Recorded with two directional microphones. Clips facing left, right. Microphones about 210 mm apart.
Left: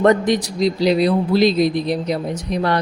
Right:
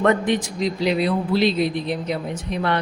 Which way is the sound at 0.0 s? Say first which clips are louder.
Left 4 dB; 35° left (ahead or behind).